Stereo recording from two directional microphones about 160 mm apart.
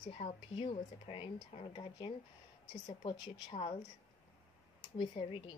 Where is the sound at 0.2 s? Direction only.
40° left (ahead or behind).